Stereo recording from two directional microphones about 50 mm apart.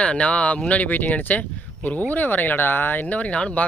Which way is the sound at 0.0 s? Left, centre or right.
Left.